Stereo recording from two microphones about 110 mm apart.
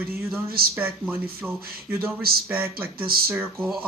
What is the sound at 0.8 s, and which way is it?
Speech, 15° right (ahead or behind).